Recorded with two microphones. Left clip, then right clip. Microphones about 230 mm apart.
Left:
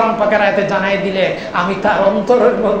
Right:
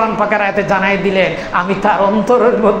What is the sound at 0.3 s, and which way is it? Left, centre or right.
Speech, right.